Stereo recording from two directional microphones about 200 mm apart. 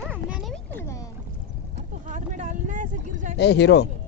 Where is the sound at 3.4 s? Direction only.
55° left (ahead or behind).